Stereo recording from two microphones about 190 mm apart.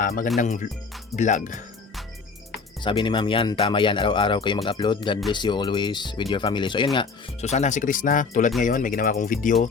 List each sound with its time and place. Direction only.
0.0 s speech: 45° left (ahead or behind)
2.8 s speech: 25° left (ahead or behind); by 9.6 s 45° left (ahead or behind)